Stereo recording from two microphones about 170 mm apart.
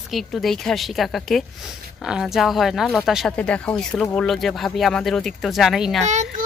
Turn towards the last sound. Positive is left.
turn(degrees=-45)  # may be behind; listen again after turning